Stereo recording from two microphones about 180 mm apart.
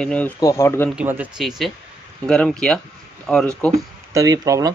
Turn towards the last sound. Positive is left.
turn(degrees=-20)  # may be behind; listen again after turning